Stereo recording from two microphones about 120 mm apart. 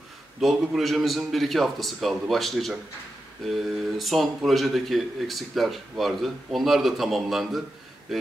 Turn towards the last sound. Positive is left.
turn(degrees=0)  # may be behind; listen again after turning